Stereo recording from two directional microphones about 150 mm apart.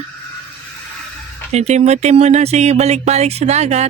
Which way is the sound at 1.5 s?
50° right (ahead or behind).